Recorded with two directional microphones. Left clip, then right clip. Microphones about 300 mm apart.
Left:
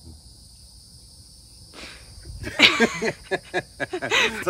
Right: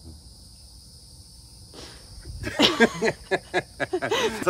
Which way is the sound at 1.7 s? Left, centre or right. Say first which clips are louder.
Left 3 dB; centre.